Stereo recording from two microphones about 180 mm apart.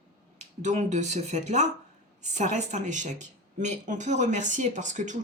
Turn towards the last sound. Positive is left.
turn(degrees=-45)  # may be behind; listen again after turning